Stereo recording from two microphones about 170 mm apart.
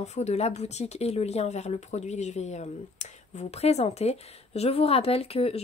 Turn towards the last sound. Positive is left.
turn(degrees=35)  # may be behind; listen again after turning